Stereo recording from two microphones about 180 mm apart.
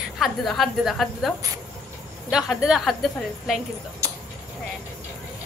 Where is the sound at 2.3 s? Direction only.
5° right (ahead or behind).